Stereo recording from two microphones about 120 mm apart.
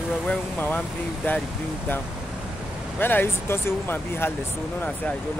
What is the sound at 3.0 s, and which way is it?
Speech, 15° left (ahead or behind).